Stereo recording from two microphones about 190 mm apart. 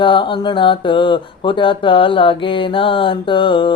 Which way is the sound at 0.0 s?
25° left (ahead or behind).